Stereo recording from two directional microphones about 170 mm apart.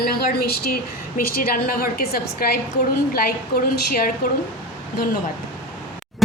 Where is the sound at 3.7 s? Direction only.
65° left (ahead or behind).